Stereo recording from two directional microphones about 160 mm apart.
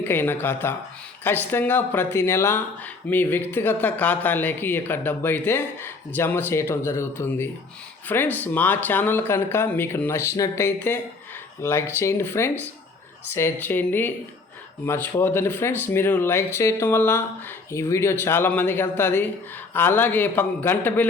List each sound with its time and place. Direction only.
0.0 s speech: 15° left (ahead or behind)